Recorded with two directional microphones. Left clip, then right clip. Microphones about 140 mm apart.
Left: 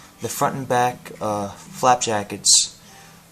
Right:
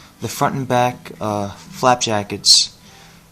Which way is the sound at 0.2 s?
55° right (ahead or behind).